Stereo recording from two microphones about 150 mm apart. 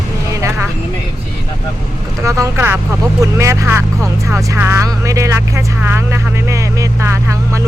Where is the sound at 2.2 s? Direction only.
20° right (ahead or behind).